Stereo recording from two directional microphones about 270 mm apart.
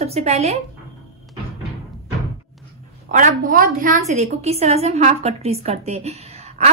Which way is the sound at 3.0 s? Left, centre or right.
Right.